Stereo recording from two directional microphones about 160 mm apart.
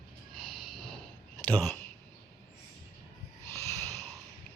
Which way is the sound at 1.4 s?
10° left (ahead or behind).